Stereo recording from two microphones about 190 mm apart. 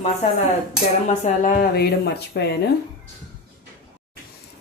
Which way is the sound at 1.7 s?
60° left (ahead or behind).